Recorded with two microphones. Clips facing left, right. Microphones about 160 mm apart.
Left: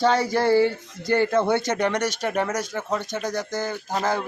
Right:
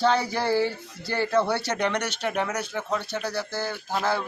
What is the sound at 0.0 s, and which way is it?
Speech, 15° left (ahead or behind).